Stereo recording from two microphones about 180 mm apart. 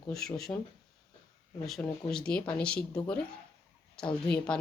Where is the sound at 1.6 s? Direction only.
Centre (ahead or behind).